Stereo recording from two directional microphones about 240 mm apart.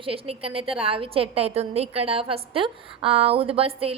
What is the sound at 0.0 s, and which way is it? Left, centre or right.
A woman's voice, right.